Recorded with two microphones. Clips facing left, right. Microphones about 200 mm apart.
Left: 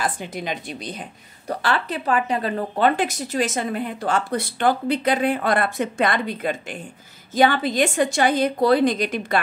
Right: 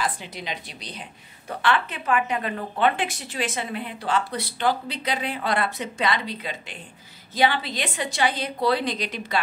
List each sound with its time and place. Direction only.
0.0 s speech: 50° left (ahead or behind)
1.5 s speech: 40° left (ahead or behind)